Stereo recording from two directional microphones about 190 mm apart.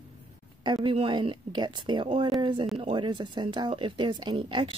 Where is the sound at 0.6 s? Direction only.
25° right (ahead or behind).